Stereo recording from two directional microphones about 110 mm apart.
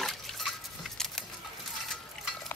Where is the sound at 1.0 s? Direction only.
5° left (ahead or behind).